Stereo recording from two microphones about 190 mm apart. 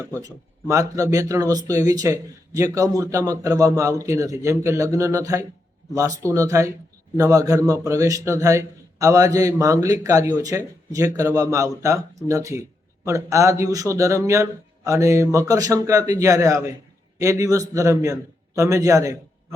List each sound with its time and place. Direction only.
0.2 s a man's voice: 15° right (ahead or behind)